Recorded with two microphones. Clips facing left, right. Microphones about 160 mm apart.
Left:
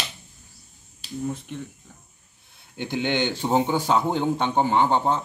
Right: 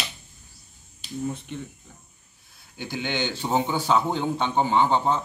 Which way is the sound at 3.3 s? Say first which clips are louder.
Left 3 dB; 15° left (ahead or behind).